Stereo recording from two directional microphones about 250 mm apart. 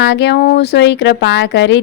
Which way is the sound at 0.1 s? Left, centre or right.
Left.